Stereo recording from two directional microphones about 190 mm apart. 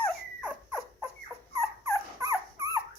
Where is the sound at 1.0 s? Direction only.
15° right (ahead or behind).